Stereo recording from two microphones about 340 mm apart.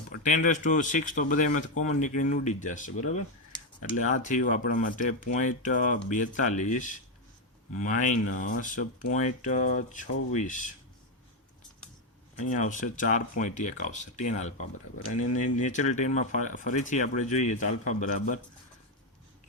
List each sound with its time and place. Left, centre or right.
0.1 s speech: left
12.4 s speech: left